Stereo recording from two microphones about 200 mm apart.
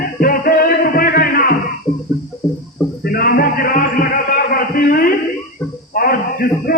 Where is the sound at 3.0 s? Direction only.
50° left (ahead or behind).